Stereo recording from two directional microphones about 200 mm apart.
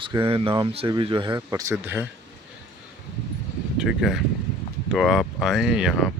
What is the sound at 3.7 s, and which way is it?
Speech, centre (ahead or behind).